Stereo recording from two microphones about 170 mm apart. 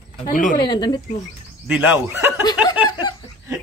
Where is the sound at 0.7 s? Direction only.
25° left (ahead or behind).